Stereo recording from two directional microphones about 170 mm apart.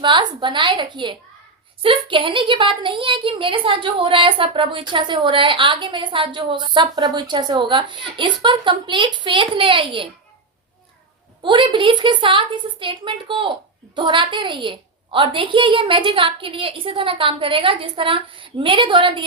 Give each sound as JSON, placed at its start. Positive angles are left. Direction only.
{"t": 0.0, "sound": "a woman's voice", "side_deg": -25}
{"t": 11.4, "sound": "a woman's voice", "side_deg": -30}